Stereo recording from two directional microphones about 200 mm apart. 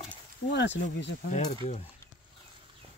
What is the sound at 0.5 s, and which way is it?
Speech, 60° left (ahead or behind).